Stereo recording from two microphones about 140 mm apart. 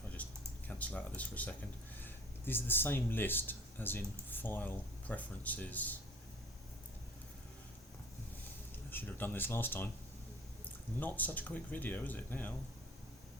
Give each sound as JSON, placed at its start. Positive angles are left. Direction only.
{"t": 0.2, "sound": "a sound", "side_deg": 10}
{"t": 0.7, "sound": "speech", "side_deg": 10}
{"t": 8.9, "sound": "speech", "side_deg": 15}
{"t": 11.0, "sound": "speech", "side_deg": 10}